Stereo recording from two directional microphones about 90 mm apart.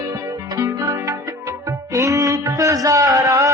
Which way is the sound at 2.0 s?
40° right (ahead or behind).